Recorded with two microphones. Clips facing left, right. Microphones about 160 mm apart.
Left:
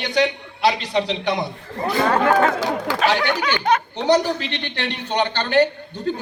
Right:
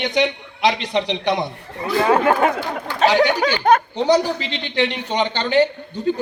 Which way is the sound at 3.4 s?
45° right (ahead or behind).